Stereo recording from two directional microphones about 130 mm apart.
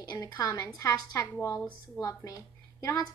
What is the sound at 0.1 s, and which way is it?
A woman's voice, 25° left (ahead or behind).